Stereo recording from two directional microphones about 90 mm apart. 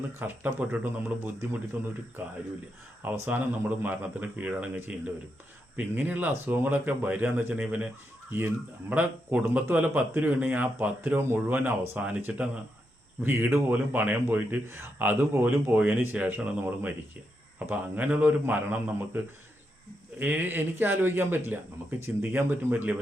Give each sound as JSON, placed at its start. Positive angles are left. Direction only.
{"t": 0.2, "sound": "a man's voice", "side_deg": -20}
{"t": 8.9, "sound": "a man's voice", "side_deg": -15}